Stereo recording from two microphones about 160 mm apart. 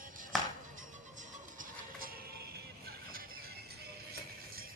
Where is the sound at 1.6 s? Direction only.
65° right (ahead or behind).